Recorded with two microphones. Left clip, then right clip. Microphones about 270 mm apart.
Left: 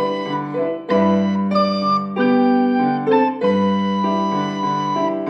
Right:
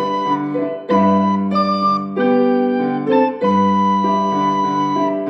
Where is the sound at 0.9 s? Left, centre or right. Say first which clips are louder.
Right 4 dB; centre.